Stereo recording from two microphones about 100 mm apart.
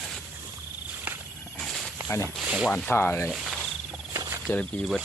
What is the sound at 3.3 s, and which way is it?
Speech, 5° right (ahead or behind).